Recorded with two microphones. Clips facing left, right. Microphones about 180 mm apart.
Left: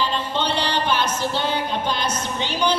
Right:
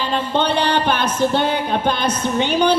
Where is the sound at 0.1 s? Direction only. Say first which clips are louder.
Right 5 dB; 55° right (ahead or behind).